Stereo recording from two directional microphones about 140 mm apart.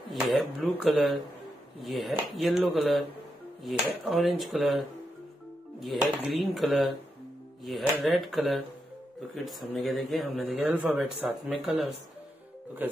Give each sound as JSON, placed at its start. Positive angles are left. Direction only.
{"t": 0.1, "sound": "speech", "side_deg": 0}
{"t": 10.7, "sound": "speech", "side_deg": -10}